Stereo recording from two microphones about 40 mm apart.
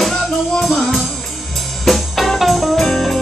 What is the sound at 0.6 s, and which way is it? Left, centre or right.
Music, centre.